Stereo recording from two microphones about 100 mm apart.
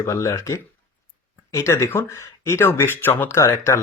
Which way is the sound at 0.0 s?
30° left (ahead or behind).